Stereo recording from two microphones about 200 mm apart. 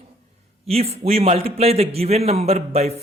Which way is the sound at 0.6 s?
30° right (ahead or behind).